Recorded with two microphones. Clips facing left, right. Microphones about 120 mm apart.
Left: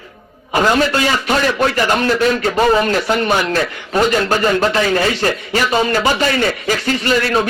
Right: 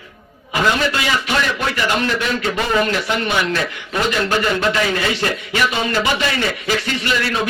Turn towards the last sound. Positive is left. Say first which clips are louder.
# left 5 dB
turn(degrees=40)  # may be behind; listen again after turning